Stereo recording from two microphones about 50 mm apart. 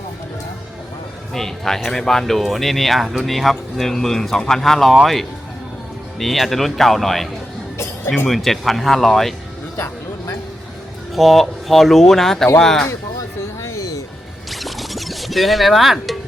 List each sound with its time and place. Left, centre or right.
1.3 s speech: centre
6.1 s speech: centre
8.3 s speech: centre
9.7 s a sound: left
11.1 s speech: centre
13.6 s music: left
14.5 s music: centre